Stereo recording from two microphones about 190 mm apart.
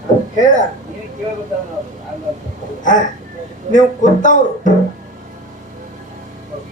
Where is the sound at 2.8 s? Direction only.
45° left (ahead or behind).